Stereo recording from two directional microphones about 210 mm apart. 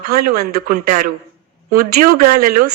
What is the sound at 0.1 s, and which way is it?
A woman's voice, 45° right (ahead or behind).